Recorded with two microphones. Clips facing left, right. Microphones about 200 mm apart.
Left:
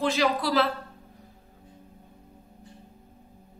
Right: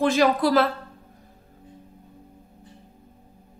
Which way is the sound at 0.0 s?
50° right (ahead or behind).